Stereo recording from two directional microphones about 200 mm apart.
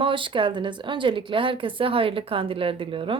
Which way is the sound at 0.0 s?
25° right (ahead or behind).